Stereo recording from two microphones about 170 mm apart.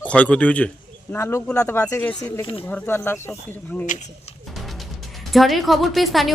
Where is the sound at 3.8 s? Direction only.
45° left (ahead or behind).